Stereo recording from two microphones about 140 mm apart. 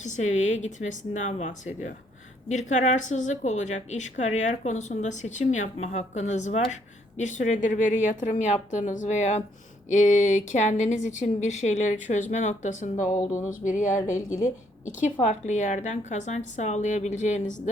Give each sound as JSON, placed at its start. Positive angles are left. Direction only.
{"t": 0.0, "sound": "a woman's voice", "side_deg": 60}